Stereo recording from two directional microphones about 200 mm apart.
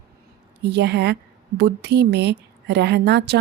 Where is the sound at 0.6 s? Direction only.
60° right (ahead or behind).